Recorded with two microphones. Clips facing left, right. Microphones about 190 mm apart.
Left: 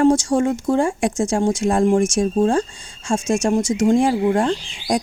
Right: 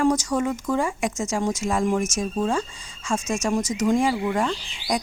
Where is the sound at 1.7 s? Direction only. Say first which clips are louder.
Left 7 dB; 35° left (ahead or behind).